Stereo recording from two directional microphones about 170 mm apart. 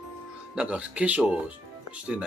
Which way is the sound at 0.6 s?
5° right (ahead or behind).